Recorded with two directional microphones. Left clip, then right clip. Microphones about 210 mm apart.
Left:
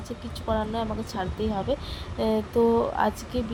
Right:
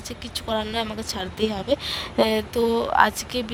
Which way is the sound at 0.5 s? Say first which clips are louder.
Right 2 dB; 45° right (ahead or behind).